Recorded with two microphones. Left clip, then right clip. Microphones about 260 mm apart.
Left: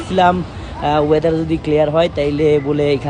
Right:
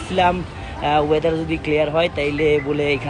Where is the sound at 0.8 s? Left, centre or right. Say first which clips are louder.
Left 3 dB; left.